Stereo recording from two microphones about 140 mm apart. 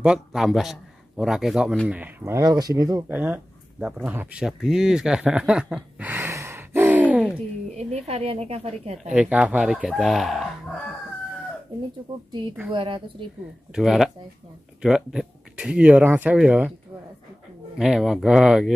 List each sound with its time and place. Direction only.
0.0 s a man's voice: 5° right (ahead or behind); by 3.2 s 25° right (ahead or behind)
3.8 s speech: 5° right (ahead or behind)
7.7 s a woman's voice: 50° right (ahead or behind)
9.1 s speech: 5° right (ahead or behind)
12.7 s a woman's voice: 35° right (ahead or behind)
13.7 s speech: 5° right (ahead or behind)
17.7 s speech: 5° right (ahead or behind)